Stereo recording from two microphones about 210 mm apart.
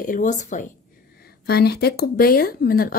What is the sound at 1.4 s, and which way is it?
Speech, 50° left (ahead or behind).